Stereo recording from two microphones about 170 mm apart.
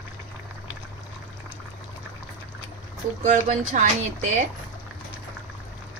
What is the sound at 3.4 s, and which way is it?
Speech, 50° right (ahead or behind).